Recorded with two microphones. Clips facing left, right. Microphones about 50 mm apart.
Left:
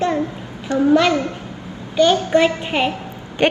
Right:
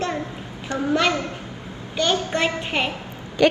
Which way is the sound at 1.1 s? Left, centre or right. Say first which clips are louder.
Left 5 dB; left.